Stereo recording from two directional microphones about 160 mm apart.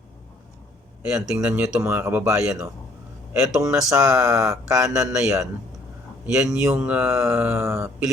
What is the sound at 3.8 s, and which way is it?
Speech, 20° right (ahead or behind).